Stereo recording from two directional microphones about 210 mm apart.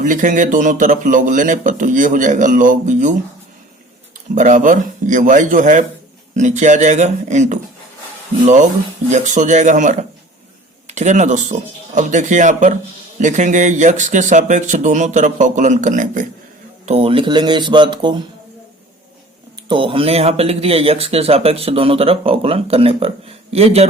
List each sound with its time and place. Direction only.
0.0 s speech: 40° right (ahead or behind)
4.4 s speech: 35° right (ahead or behind)
9.0 s speech: 35° right (ahead or behind)
19.6 s speech: 25° right (ahead or behind)